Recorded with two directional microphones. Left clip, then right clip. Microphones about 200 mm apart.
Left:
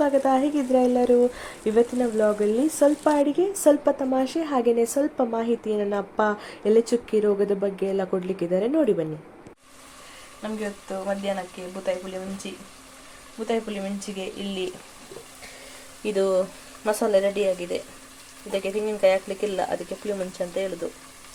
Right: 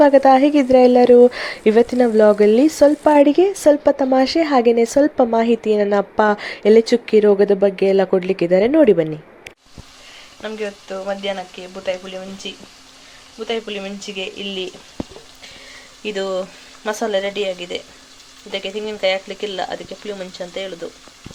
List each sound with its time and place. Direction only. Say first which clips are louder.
0.0 s speech: right 10 dB; 20° right (ahead or behind)
10.4 s speech: right 6 dB; 5° right (ahead or behind)
12.4 s speech: right 6 dB; centre (ahead or behind)
16.0 s speech: even; 5° left (ahead or behind)